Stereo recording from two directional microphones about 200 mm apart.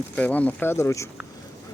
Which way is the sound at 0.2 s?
5° left (ahead or behind).